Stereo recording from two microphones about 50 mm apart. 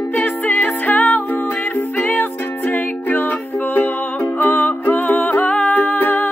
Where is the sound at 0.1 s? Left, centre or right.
Left.